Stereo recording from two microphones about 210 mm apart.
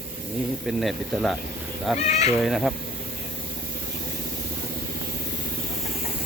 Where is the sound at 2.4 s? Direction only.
Centre (ahead or behind).